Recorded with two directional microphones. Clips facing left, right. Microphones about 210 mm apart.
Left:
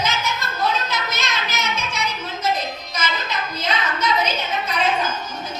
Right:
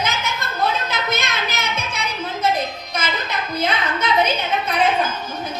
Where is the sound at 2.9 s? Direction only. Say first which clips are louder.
Right 2 dB; 55° right (ahead or behind).